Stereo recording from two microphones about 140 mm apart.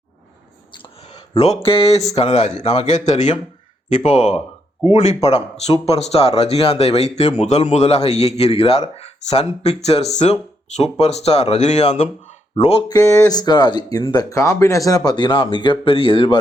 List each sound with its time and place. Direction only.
1.6 s speech: 45° left (ahead or behind)
12.9 s speech: 25° left (ahead or behind); by 16.4 s 40° left (ahead or behind)